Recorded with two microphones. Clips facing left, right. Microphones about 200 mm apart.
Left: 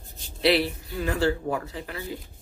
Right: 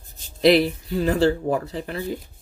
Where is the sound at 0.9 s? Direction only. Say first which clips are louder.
Right 6 dB; 35° right (ahead or behind).